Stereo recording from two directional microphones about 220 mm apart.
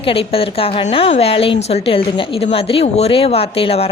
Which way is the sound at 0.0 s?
25° left (ahead or behind).